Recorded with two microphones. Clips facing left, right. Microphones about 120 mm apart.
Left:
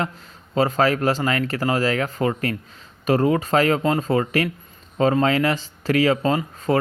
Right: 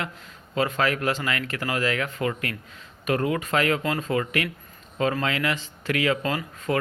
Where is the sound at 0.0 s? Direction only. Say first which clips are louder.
Left 6 dB; 35° left (ahead or behind).